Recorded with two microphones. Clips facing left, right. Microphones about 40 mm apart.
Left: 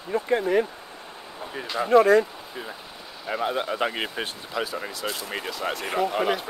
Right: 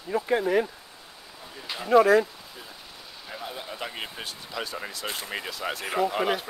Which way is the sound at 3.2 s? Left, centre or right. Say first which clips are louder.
Left 11 dB; left.